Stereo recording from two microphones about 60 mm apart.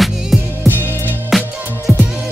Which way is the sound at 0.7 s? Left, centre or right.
Right.